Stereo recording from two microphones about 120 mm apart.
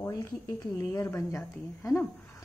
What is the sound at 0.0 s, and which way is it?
A woman's voice, 25° left (ahead or behind).